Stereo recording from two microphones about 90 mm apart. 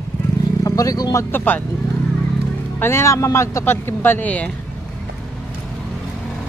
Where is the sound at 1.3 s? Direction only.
20° left (ahead or behind).